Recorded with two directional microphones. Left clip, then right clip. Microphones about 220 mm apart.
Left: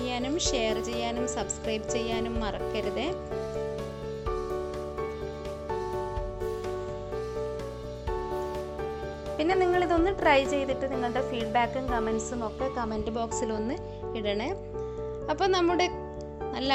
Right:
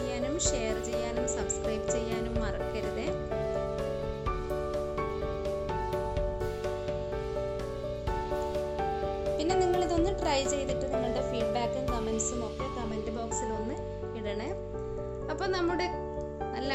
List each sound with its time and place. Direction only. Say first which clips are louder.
0.1 s speech: left 3 dB; 20° left (ahead or behind)
9.4 s music: left 4 dB; 15° left (ahead or behind)
11.1 s speech: left 2 dB; 10° left (ahead or behind)
13.1 s speech: left 5 dB; 25° left (ahead or behind)
15.3 s speech: left 6 dB; 25° left (ahead or behind)